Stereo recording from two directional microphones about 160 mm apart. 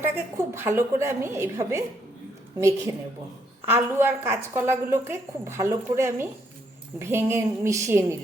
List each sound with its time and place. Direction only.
0.0 s a woman's voice: 15° right (ahead or behind)